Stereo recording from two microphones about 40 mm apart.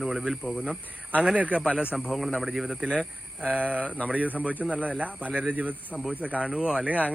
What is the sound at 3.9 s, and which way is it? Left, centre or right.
Speech, left.